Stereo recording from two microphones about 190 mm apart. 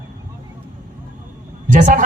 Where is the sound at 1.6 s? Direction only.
40° right (ahead or behind).